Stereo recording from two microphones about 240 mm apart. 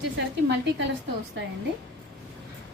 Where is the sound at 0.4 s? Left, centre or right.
Right.